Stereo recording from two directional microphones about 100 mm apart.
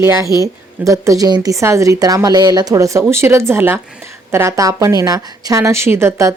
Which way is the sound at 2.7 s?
30° right (ahead or behind).